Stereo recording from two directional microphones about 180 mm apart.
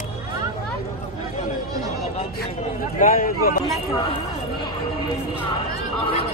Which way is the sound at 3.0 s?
55° left (ahead or behind).